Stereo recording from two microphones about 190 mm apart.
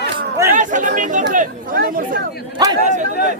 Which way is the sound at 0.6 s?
45° right (ahead or behind).